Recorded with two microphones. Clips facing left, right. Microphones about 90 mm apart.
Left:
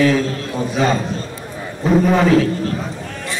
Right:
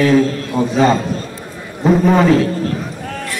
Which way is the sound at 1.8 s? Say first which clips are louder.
Right 2 dB; centre (ahead or behind).